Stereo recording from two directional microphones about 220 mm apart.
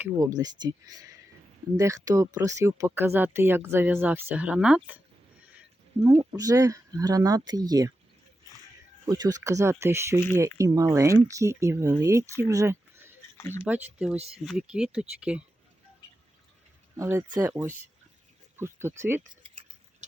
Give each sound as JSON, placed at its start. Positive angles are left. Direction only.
{"t": 0.0, "sound": "speech", "side_deg": -15}
{"t": 6.3, "sound": "speech", "side_deg": -15}
{"t": 9.0, "sound": "speech", "side_deg": -15}
{"t": 13.3, "sound": "a sound", "side_deg": 10}
{"t": 13.7, "sound": "speech", "side_deg": -5}
{"t": 17.0, "sound": "speech", "side_deg": -15}